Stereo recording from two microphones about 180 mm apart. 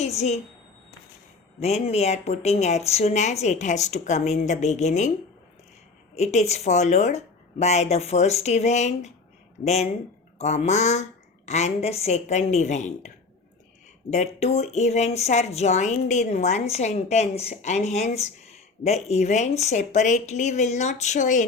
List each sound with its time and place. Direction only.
0.0 s a sound: 35° left (ahead or behind)
1.5 s a woman's voice: 35° left (ahead or behind)
6.1 s a woman's voice: 40° left (ahead or behind)
14.1 s a woman's voice: 40° left (ahead or behind)